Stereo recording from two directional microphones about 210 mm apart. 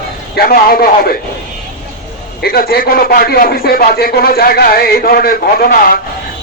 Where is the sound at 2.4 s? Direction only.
45° left (ahead or behind).